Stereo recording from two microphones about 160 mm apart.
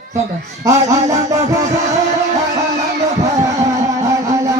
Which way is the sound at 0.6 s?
20° right (ahead or behind).